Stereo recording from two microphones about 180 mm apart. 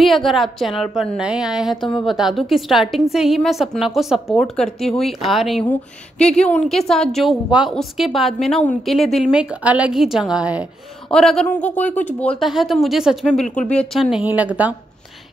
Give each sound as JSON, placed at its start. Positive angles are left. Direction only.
{"t": 0.0, "sound": "a woman's voice", "side_deg": 0}